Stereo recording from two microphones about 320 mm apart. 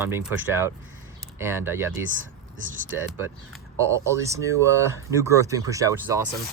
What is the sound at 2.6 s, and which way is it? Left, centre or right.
Speech, right.